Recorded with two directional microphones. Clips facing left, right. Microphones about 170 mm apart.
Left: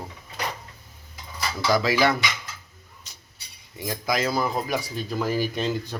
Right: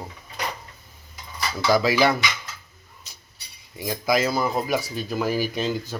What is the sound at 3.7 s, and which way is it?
Speech, 15° right (ahead or behind).